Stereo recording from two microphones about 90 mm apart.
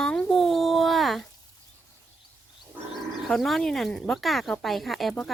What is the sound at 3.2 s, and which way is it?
Speech, centre (ahead or behind).